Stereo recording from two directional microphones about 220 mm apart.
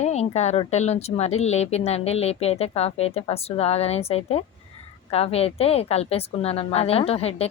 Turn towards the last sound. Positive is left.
turn(degrees=30)  # may be behind; listen again after turning